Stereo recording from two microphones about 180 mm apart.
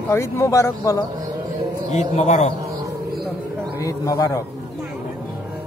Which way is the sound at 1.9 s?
40° left (ahead or behind).